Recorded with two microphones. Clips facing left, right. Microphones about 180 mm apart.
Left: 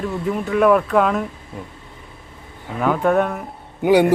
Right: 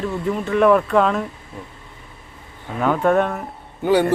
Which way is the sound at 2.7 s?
Centre (ahead or behind).